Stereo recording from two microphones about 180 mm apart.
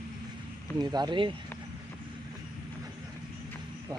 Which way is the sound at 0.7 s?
25° right (ahead or behind).